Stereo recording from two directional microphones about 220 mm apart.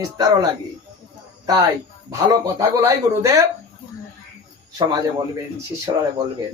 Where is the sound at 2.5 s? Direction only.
15° right (ahead or behind).